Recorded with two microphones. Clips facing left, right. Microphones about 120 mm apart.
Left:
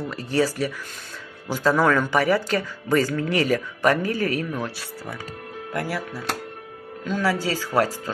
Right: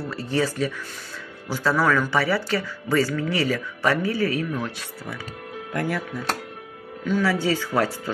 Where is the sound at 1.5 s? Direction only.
20° left (ahead or behind).